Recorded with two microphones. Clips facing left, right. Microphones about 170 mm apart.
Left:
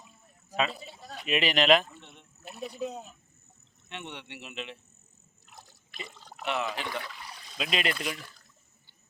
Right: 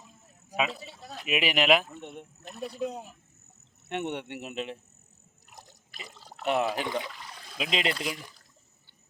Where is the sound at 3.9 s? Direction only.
50° right (ahead or behind).